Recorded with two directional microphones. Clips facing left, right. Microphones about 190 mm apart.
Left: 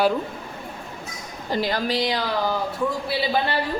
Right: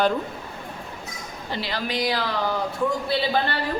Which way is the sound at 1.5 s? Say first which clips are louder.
Left 5 dB; 45° left (ahead or behind).